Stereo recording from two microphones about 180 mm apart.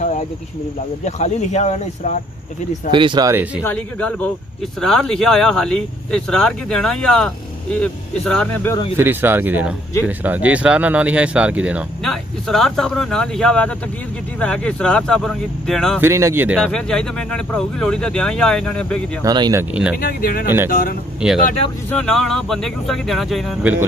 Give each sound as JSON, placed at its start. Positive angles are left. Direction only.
{"t": 1.0, "sound": "speech", "side_deg": 40}
{"t": 2.9, "sound": "speech", "side_deg": -25}
{"t": 3.6, "sound": "speech", "side_deg": 10}
{"t": 8.9, "sound": "speech", "side_deg": -10}
{"t": 16.0, "sound": "speech", "side_deg": -15}
{"t": 16.7, "sound": "speech", "side_deg": 5}
{"t": 19.2, "sound": "speech", "side_deg": -20}
{"t": 19.7, "sound": "speech", "side_deg": -5}
{"t": 20.0, "sound": "speech", "side_deg": 55}
{"t": 21.2, "sound": "speech", "side_deg": -5}